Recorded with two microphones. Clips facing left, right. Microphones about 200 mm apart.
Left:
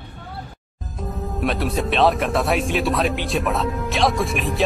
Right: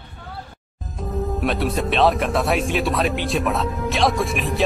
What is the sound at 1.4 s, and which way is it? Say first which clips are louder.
A man's voice: left 2 dB; centre (ahead or behind).